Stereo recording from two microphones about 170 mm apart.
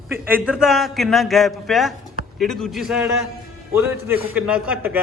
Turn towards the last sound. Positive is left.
turn(degrees=-10)  # may be behind; listen again after turning